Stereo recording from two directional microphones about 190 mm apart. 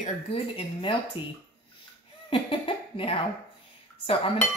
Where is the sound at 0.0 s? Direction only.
30° left (ahead or behind).